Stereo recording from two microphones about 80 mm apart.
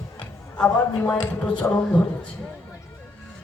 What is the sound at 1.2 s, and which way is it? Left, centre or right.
Speech, centre.